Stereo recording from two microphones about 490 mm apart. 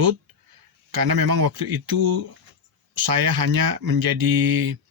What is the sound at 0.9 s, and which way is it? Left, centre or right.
Speech, right.